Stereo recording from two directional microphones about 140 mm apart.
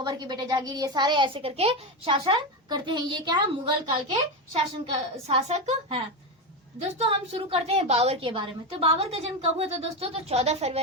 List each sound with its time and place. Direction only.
0.0 s a child's voice: 30° right (ahead or behind)
3.9 s a woman's voice: 45° right (ahead or behind)